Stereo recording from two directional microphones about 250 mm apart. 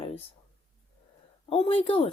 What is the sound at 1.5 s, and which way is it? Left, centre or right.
Speech, left.